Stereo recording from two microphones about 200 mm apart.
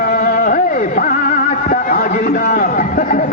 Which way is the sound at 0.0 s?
45° left (ahead or behind).